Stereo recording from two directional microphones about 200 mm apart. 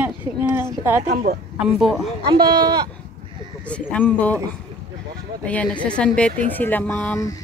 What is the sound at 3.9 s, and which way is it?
Speech, 5° left (ahead or behind).